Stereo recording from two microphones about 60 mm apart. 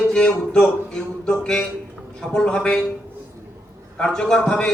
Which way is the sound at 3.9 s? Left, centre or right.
Centre.